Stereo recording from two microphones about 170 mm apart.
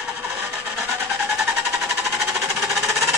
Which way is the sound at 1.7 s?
Centre (ahead or behind).